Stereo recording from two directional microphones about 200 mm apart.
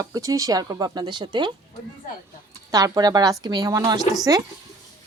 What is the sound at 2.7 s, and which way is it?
A woman's voice, 15° right (ahead or behind).